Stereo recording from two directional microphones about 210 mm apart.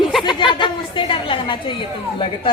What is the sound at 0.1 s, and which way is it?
Chatter, centre (ahead or behind).